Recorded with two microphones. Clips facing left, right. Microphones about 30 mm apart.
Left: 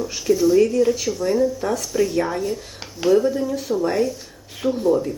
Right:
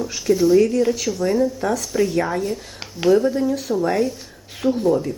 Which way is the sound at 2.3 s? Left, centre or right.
Right.